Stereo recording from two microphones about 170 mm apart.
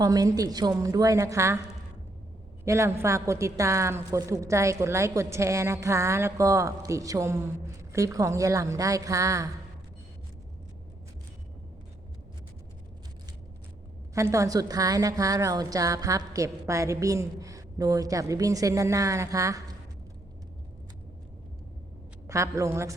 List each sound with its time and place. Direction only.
0.0 s a woman's voice: 20° right (ahead or behind)
2.6 s a woman's voice: 15° right (ahead or behind)
14.1 s a woman's voice: 20° right (ahead or behind)
22.3 s a woman's voice: 20° right (ahead or behind)